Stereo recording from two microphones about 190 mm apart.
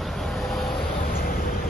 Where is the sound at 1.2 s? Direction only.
50° left (ahead or behind).